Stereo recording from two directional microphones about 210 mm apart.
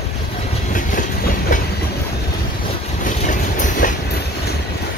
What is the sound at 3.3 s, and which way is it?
Train, 40° left (ahead or behind).